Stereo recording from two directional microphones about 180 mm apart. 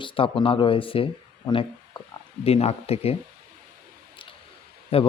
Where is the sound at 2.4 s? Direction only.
35° left (ahead or behind).